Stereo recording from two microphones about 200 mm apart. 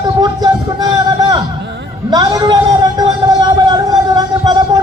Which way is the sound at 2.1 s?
20° right (ahead or behind).